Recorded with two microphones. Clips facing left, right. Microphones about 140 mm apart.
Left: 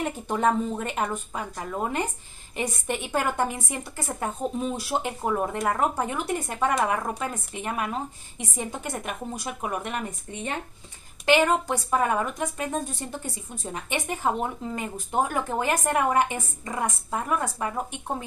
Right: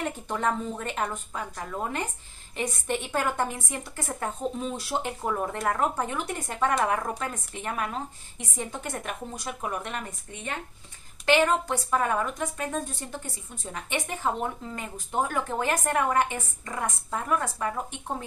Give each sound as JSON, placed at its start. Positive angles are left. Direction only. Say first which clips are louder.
{"t": 0.0, "sound": "a woman's voice", "louder": "left 4 dB", "side_deg": 15}
{"t": 11.2, "sound": "a woman's voice", "louder": "left 1 dB", "side_deg": 15}
{"t": 13.8, "sound": "a woman's voice", "louder": "left 2 dB", "side_deg": 15}